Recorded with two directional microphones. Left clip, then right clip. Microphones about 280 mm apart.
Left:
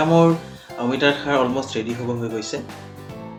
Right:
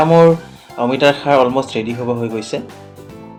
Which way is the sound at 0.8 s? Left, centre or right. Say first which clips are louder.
Right 6 dB; centre.